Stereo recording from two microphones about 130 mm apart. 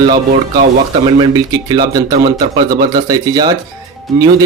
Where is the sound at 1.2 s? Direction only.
30° right (ahead or behind).